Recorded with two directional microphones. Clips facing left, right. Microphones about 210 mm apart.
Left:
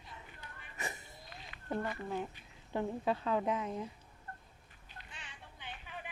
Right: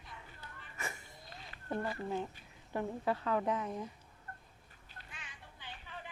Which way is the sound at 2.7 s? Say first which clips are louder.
Left 1 dB; 20° left (ahead or behind).